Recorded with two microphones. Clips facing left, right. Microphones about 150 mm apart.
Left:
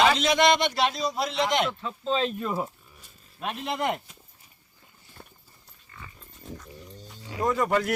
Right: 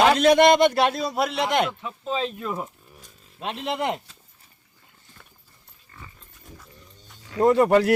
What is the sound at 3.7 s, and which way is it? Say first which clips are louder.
Speech: even; 20° right (ahead or behind).